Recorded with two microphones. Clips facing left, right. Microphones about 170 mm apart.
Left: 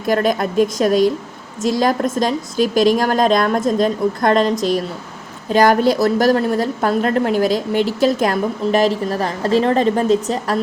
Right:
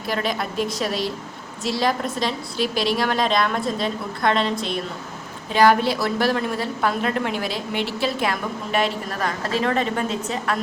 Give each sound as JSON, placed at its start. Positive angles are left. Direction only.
{"t": 0.1, "sound": "a woman's voice", "side_deg": 50}